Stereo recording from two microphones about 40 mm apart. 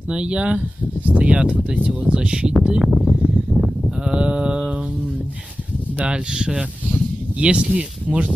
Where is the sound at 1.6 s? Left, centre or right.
Centre.